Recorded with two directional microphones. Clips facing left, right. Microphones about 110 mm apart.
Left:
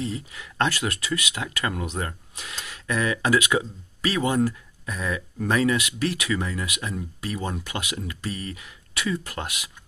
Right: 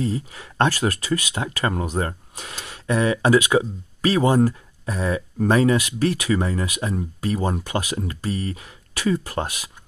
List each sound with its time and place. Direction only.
0.0 s speech: 35° right (ahead or behind)